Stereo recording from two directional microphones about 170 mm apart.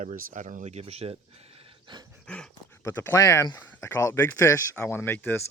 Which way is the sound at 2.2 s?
5° left (ahead or behind).